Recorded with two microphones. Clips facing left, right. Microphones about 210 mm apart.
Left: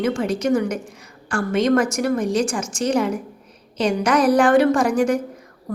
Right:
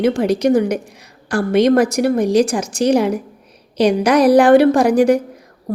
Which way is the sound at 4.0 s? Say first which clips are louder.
Right 5 dB; 35° right (ahead or behind).